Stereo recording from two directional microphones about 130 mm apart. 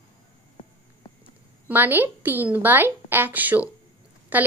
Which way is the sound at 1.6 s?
15° right (ahead or behind).